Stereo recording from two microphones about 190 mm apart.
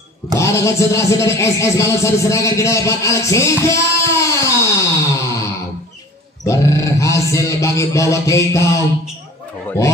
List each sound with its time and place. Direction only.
0.4 s speech: 15° left (ahead or behind)
6.4 s music: 15° left (ahead or behind)